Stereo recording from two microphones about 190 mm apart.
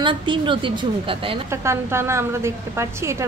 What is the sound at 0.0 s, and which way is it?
A woman's voice, 25° right (ahead or behind).